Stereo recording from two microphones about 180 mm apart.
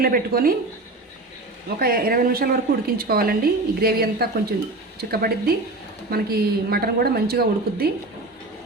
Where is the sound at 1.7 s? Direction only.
55° right (ahead or behind).